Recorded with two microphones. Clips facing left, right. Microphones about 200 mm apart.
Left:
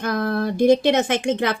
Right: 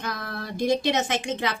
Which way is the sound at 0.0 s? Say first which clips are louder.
Left 11 dB; 55° left (ahead or behind).